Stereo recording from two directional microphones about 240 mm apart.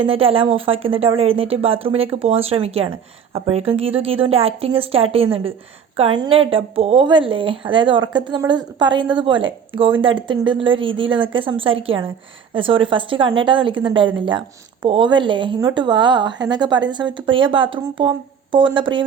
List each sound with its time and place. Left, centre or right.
0.0 s a woman's voice: right